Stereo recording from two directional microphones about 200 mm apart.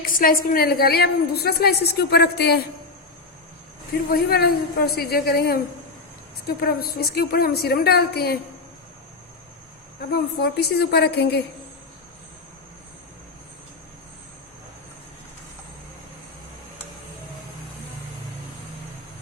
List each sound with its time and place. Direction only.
0.0 s a woman's voice: 45° left (ahead or behind)
4.1 s a woman's voice: 50° left (ahead or behind)
10.1 s a woman's voice: 50° left (ahead or behind)